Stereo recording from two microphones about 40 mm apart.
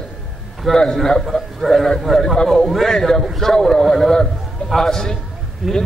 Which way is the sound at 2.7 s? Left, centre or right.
Centre.